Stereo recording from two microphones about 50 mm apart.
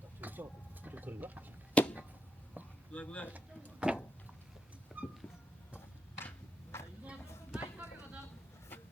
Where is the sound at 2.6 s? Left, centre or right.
Right.